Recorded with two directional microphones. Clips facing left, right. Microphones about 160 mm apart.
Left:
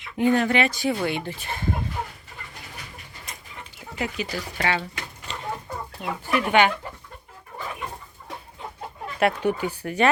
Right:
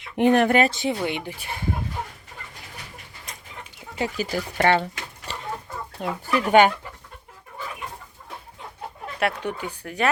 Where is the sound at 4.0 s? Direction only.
30° right (ahead or behind).